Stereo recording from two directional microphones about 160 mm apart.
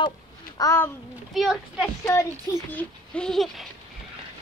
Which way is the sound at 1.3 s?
Centre (ahead or behind).